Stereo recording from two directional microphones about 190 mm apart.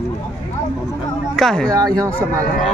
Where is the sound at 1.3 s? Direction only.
Centre (ahead or behind).